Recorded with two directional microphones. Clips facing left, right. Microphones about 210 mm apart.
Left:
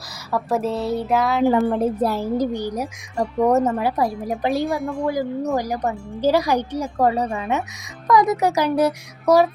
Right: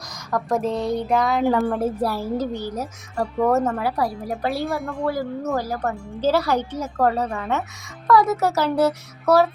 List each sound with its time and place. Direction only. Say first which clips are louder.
0.3 s speech: left 1 dB; 5° left (ahead or behind)
1.7 s speech: left 3 dB; 20° left (ahead or behind)